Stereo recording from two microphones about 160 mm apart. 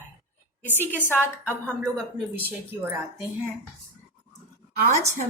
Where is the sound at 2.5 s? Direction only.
10° right (ahead or behind).